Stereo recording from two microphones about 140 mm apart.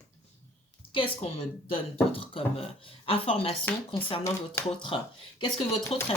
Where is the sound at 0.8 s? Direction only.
40° left (ahead or behind).